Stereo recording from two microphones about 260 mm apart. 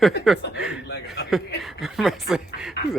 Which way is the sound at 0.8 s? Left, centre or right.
Left.